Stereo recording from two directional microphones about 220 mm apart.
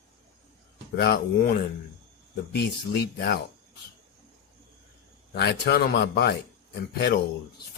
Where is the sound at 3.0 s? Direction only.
45° left (ahead or behind).